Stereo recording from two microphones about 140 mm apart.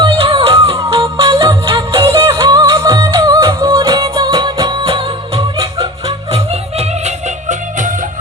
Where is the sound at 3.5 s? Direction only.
35° right (ahead or behind).